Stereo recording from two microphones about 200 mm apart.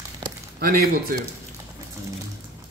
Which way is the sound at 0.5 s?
50° right (ahead or behind).